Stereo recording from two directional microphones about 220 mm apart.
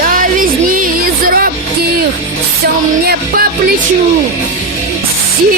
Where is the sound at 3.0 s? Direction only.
45° right (ahead or behind).